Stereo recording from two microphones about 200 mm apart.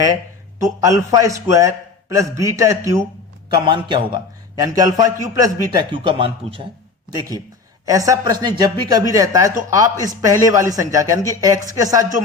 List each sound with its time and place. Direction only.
0.6 s a man's voice: 15° right (ahead or behind)